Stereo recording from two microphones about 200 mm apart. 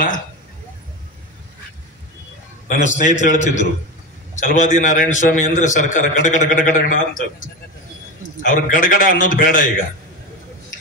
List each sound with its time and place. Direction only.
2.7 s a man's voice: 40° left (ahead or behind)